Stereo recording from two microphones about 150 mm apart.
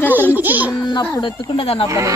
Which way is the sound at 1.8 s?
20° right (ahead or behind).